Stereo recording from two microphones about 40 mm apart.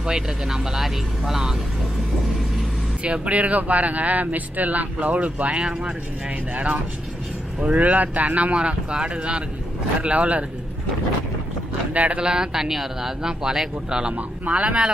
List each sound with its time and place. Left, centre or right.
0.0 s speech: centre
3.0 s speech: right
5.6 s speech: right
8.5 s speech: right
11.9 s speech: right
12.2 s speech: centre
14.6 s speech: right